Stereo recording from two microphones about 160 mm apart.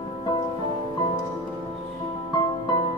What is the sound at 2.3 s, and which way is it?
Music, 30° left (ahead or behind).